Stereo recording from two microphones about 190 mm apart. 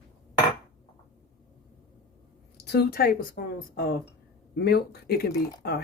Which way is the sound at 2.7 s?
55° left (ahead or behind).